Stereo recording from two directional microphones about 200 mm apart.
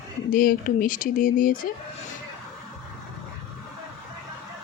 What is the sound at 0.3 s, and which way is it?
Speech, 45° left (ahead or behind).